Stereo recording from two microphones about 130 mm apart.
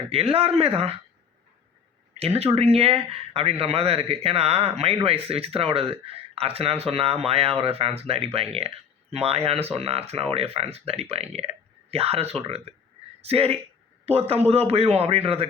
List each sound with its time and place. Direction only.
0.1 s speech: 50° right (ahead or behind)
2.1 s speech: 50° right (ahead or behind)